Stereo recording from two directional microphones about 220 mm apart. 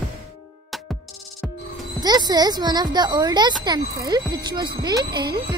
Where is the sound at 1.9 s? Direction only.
20° right (ahead or behind).